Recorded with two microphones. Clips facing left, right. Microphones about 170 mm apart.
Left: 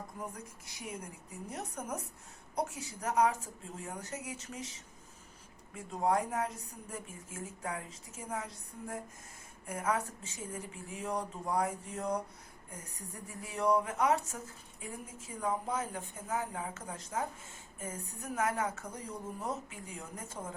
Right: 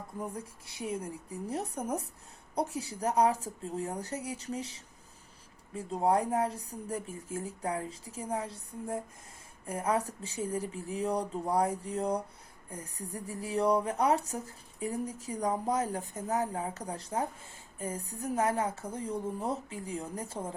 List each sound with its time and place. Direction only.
0.2 s speech: 30° right (ahead or behind)